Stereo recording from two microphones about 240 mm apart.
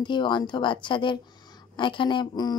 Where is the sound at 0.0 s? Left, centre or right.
Centre.